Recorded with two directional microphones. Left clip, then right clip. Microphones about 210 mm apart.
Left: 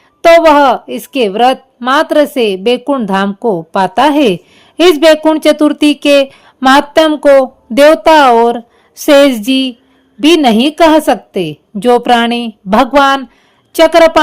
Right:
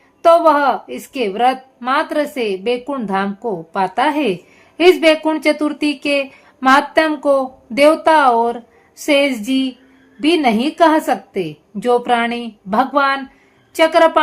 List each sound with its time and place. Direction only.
0.2 s a woman's voice: 45° left (ahead or behind)